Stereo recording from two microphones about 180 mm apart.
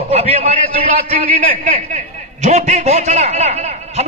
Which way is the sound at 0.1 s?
35° right (ahead or behind).